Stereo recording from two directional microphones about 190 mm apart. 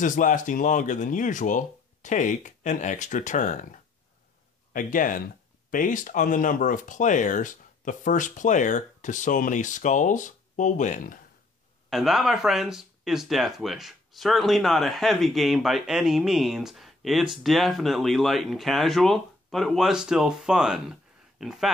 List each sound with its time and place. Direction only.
0.0 s speech: 45° left (ahead or behind)
11.9 s speech: centre (ahead or behind)